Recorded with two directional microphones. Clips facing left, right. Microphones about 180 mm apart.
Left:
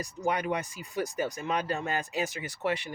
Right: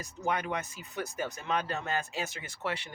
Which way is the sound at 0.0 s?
15° left (ahead or behind).